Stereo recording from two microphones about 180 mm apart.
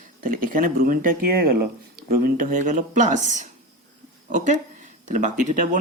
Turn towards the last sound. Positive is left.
turn(degrees=-45)  # may be behind; listen again after turning